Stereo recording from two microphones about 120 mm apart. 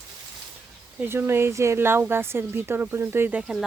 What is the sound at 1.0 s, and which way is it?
A woman's voice, 20° right (ahead or behind).